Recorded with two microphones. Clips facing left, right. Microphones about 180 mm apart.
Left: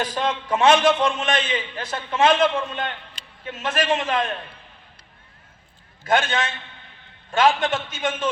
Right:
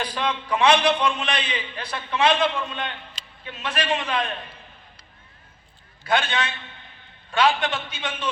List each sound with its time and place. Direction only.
0.0 s a man's voice: 45° left (ahead or behind)
6.1 s a man's voice: 45° left (ahead or behind)